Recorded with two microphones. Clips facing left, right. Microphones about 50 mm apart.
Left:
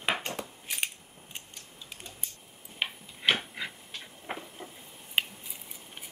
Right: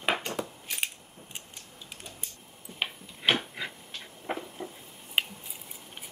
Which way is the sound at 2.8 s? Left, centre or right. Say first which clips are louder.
Even; centre.